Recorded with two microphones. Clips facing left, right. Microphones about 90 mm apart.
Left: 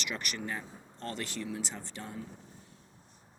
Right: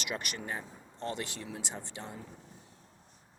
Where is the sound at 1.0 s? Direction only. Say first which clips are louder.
Even; 20° right (ahead or behind).